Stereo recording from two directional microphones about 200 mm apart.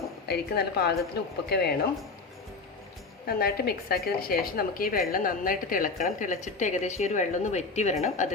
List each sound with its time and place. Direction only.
0.3 s a woman's voice: 55° left (ahead or behind)
3.2 s a woman's voice: 50° left (ahead or behind)